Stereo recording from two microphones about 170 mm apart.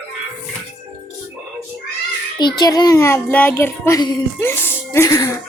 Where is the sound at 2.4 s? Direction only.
25° left (ahead or behind).